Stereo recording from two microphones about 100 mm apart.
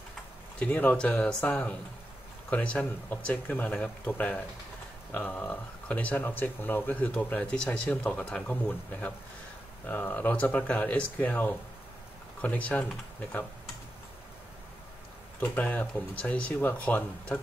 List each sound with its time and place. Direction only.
0.6 s speech: 15° left (ahead or behind)
9.8 s speech: 20° left (ahead or behind)
15.4 s speech: 15° left (ahead or behind)